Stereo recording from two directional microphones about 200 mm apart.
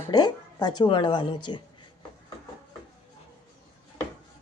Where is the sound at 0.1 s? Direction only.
20° left (ahead or behind).